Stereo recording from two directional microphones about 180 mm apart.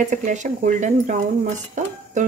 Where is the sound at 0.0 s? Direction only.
45° right (ahead or behind).